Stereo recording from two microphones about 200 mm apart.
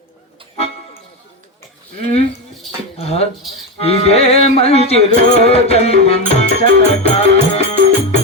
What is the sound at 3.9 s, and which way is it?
Music, 30° left (ahead or behind).